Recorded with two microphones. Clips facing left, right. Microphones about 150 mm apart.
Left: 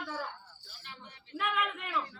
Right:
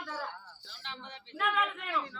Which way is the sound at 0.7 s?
90° right.